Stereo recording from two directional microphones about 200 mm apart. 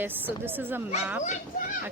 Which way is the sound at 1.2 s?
35° left (ahead or behind).